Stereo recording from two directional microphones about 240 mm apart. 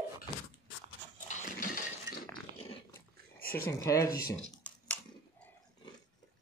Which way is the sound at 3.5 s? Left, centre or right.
Centre.